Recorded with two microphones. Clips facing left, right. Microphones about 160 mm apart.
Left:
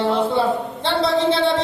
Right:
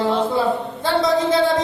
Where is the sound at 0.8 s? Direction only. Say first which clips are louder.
Right 1 dB; 30° left (ahead or behind).